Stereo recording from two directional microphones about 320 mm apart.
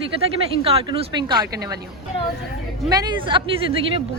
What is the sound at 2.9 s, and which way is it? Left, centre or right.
Speech, centre.